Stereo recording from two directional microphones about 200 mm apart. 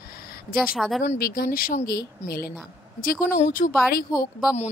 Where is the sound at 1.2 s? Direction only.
45° left (ahead or behind).